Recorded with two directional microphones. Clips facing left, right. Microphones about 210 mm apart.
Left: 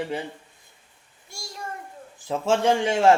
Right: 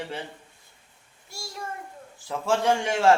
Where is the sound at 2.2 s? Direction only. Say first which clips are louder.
Left 2 dB; 20° left (ahead or behind).